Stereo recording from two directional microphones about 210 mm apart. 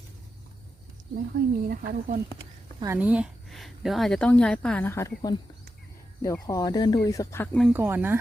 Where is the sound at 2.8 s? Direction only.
10° right (ahead or behind).